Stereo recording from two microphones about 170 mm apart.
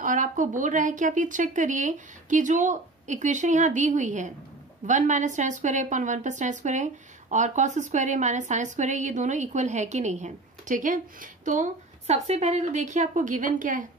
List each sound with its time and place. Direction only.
0.0 s a woman's voice: 50° right (ahead or behind)